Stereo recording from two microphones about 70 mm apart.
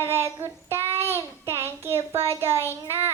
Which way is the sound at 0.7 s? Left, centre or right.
Right.